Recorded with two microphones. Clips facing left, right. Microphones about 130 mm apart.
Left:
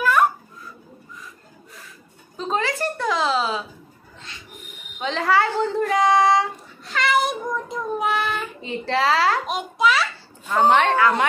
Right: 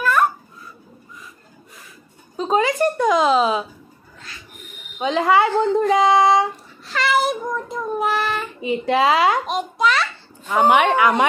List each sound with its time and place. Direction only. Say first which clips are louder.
2.5 s speech: right 7 dB; 15° right (ahead or behind)
4.9 s a woman's voice: right 4 dB; 20° right (ahead or behind)
6.9 s child singing: right 2 dB; centre (ahead or behind)
8.5 s speech: right 6 dB; 15° right (ahead or behind)
9.5 s a sound: right 1 dB; centre (ahead or behind)
10.4 s speech: right 2 dB; 10° right (ahead or behind)